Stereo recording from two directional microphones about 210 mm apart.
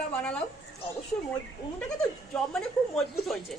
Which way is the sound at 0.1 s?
5° left (ahead or behind).